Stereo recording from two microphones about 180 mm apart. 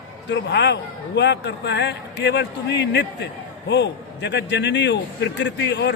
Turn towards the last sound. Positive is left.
turn(degrees=75)  # may be behind; listen again after turning